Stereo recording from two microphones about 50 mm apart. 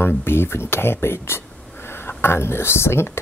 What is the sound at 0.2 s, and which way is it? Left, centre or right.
Speech, left.